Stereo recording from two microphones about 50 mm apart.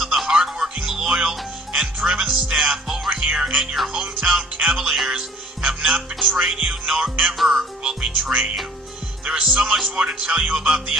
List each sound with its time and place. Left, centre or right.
0.3 s music: centre
2.8 s music: centre
3.1 s music: centre
4.8 s music: centre
5.6 s music: centre
7.3 s speech: centre
8.0 s music: right